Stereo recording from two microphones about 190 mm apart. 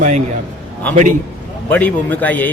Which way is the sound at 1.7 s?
10° left (ahead or behind).